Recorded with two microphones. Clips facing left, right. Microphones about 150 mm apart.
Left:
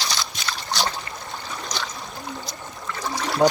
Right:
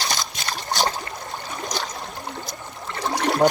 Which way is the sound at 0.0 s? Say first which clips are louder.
Right 1 dB; 45° right (ahead or behind).